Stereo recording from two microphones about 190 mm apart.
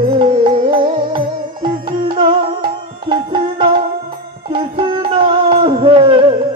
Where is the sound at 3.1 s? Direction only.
25° right (ahead or behind).